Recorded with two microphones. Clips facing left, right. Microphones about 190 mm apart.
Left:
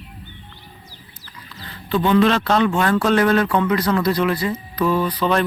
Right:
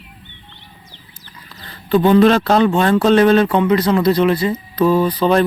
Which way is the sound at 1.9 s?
40° right (ahead or behind).